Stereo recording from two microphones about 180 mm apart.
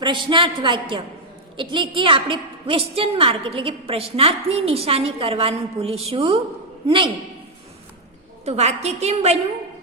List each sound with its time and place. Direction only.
0.0 s a woman's voice: 25° right (ahead or behind)
8.4 s a woman's voice: 35° right (ahead or behind)